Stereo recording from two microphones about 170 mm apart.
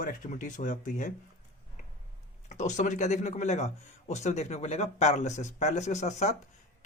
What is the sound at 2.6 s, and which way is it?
Speech, 45° left (ahead or behind).